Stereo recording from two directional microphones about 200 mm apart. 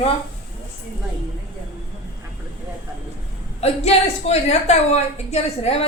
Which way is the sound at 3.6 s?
35° left (ahead or behind).